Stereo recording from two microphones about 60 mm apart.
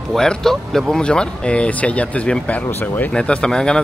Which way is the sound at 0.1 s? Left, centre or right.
Centre.